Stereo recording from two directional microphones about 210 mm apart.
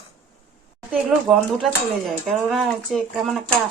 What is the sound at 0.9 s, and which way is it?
Speech, centre (ahead or behind).